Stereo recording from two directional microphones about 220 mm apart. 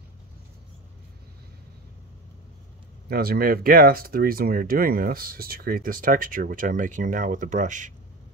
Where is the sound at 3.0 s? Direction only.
45° right (ahead or behind).